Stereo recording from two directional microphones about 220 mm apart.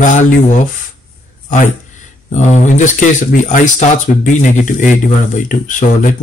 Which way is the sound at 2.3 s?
35° left (ahead or behind).